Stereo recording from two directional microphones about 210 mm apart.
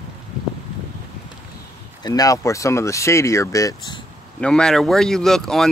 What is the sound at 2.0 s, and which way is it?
Speech, 20° left (ahead or behind).